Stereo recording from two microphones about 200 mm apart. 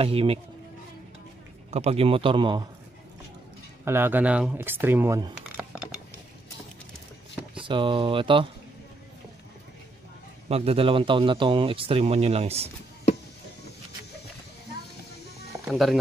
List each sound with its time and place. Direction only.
0.0 s speech: 30° right (ahead or behind)
1.7 s speech: 30° right (ahead or behind)
3.8 s speech: 10° right (ahead or behind)
7.6 s speech: 25° right (ahead or behind)
10.5 s speech: 30° right (ahead or behind)
15.7 s speech: centre (ahead or behind)